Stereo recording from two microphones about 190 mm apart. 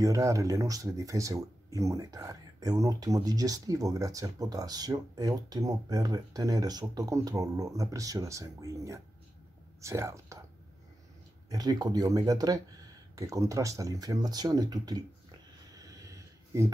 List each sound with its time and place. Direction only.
0.0 s speech: 15° right (ahead or behind)
11.4 s speech: 20° right (ahead or behind)
15.7 s a sound: 20° right (ahead or behind)